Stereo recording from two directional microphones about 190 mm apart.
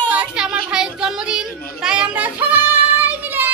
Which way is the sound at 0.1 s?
5° right (ahead or behind).